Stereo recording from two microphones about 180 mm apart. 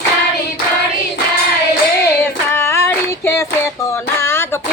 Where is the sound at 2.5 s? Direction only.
15° left (ahead or behind).